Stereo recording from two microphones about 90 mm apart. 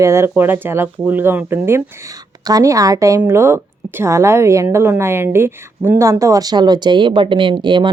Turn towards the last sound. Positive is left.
turn(degrees=-60)  # may be behind; listen again after turning